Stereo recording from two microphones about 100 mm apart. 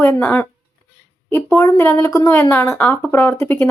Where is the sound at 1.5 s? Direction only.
30° left (ahead or behind).